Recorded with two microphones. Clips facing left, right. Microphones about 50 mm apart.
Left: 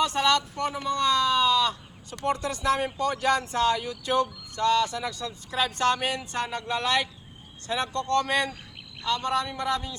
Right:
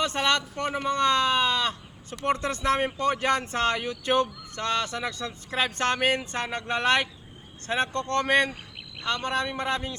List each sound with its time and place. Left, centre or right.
0.0 s speech: right